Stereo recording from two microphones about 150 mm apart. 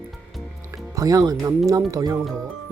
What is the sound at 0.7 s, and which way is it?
Music, 20° right (ahead or behind).